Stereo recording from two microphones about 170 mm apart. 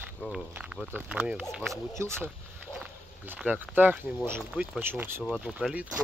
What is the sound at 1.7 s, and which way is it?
Speech, 15° right (ahead or behind).